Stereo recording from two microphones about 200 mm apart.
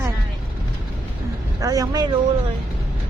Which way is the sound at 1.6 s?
15° right (ahead or behind).